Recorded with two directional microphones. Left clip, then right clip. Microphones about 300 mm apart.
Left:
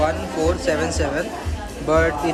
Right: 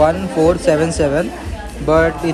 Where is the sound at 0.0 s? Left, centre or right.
Centre.